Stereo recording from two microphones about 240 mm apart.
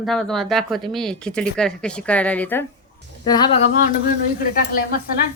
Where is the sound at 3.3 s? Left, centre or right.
Centre.